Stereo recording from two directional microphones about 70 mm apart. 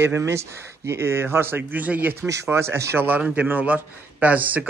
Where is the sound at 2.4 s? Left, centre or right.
Right.